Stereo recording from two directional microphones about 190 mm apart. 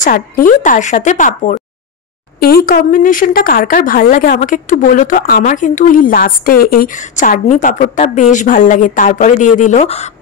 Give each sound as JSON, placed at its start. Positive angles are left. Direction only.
{"t": 0.0, "sound": "speech", "side_deg": 45}
{"t": 2.4, "sound": "a woman's voice", "side_deg": 50}